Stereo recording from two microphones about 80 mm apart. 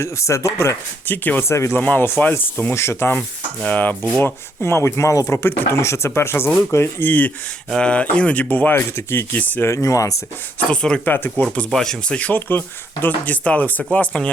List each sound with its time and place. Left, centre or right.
0.0 s speech: left
1.0 s speech: left
1.7 s speech: left
4.2 s speech: left
7.7 s speech: centre
9.6 s speech: left
10.7 s speech: centre
11.1 s speech: left
11.7 s speech: centre